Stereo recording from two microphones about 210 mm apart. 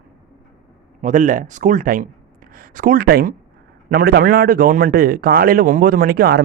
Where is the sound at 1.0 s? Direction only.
40° right (ahead or behind).